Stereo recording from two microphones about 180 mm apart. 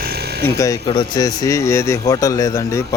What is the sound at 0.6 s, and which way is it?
A man's voice, 20° left (ahead or behind).